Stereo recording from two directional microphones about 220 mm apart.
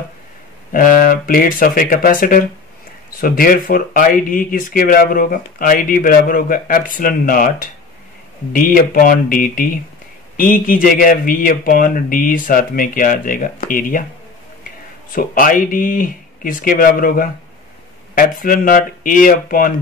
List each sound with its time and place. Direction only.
0.7 s speech: 40° left (ahead or behind)
15.1 s speech: 40° left (ahead or behind)